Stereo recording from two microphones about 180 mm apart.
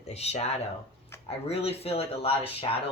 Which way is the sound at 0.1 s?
35° left (ahead or behind).